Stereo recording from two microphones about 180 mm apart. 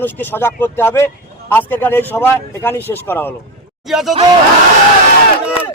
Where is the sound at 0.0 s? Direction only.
10° left (ahead or behind).